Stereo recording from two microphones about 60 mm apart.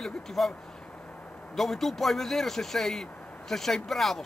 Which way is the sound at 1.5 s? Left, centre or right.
Centre.